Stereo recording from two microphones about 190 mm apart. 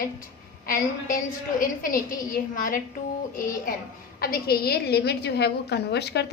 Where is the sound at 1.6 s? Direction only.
45° left (ahead or behind).